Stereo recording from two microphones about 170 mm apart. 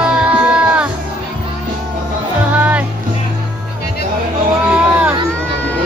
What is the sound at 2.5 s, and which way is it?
Music, 10° right (ahead or behind).